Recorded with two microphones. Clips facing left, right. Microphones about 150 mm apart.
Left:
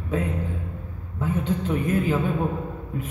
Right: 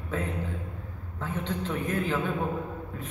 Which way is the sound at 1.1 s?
15° left (ahead or behind).